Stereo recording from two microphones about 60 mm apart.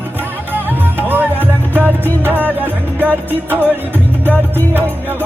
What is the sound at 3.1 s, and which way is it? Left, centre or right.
Music, left.